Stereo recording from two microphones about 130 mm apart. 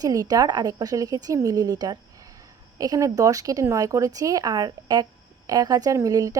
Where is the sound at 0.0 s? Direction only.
30° right (ahead or behind).